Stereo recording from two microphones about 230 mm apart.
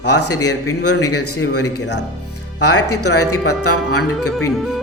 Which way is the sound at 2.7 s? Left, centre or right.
Left.